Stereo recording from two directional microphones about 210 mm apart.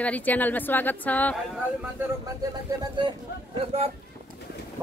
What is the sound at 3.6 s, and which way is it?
Speech, 30° right (ahead or behind).